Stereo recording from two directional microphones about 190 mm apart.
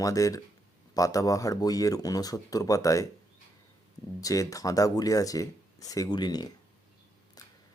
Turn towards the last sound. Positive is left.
turn(degrees=20)  # may be behind; listen again after turning